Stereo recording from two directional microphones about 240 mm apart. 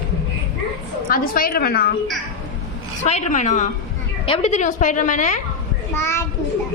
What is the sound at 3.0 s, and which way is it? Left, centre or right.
A woman's voice, left.